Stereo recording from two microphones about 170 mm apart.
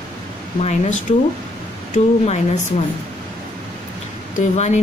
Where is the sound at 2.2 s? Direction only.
40° left (ahead or behind).